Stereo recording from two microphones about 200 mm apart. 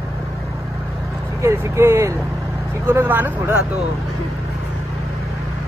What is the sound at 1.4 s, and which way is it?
Speech, 15° right (ahead or behind).